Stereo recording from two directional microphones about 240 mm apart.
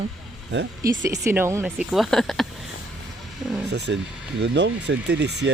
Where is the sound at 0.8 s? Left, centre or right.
Centre.